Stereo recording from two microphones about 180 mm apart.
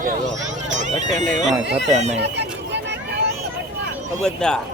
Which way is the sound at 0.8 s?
40° right (ahead or behind).